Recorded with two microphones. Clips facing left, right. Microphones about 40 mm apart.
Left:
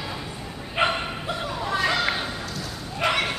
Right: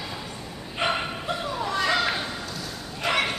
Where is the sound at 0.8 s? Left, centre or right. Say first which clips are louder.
Left 3 dB; left.